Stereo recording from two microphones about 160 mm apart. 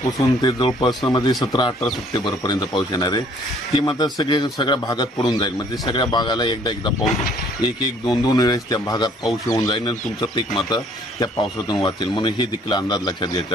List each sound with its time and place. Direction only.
0.4 s a man's voice: 30° left (ahead or behind)